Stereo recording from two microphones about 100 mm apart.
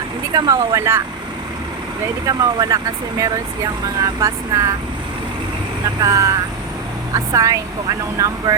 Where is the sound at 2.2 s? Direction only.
40° right (ahead or behind).